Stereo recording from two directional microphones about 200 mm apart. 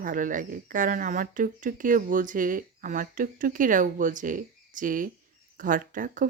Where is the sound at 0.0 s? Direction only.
40° right (ahead or behind).